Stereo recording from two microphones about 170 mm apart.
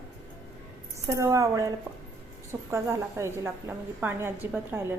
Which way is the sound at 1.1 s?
20° right (ahead or behind).